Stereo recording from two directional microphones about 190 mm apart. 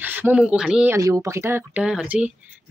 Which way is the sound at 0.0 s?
10° right (ahead or behind).